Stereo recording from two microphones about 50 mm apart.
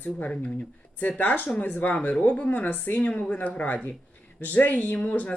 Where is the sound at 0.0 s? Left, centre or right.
Left.